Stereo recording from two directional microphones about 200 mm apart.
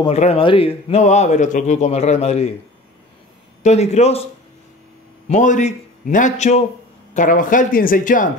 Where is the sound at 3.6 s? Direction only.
35° left (ahead or behind).